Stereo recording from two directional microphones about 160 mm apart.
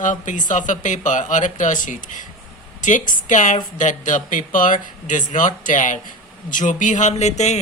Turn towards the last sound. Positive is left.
turn(degrees=45)  # may be behind; listen again after turning